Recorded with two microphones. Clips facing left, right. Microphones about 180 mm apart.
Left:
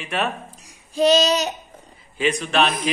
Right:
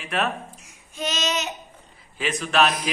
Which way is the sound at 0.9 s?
35° left (ahead or behind).